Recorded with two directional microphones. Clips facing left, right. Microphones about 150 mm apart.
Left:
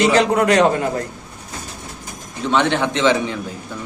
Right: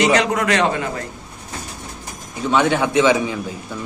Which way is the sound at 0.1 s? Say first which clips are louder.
Left 3 dB; 35° left (ahead or behind).